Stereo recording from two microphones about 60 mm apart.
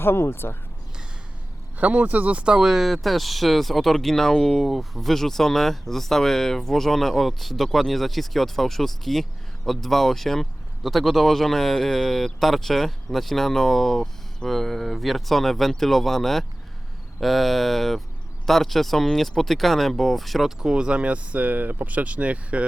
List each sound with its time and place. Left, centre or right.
0.0 s speech: left
1.8 s speech: right